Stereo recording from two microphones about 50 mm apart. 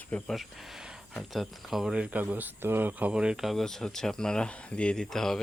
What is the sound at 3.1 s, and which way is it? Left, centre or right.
Speech, centre.